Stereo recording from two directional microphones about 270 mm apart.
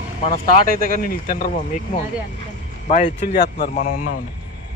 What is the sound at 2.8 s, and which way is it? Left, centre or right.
Speech, left.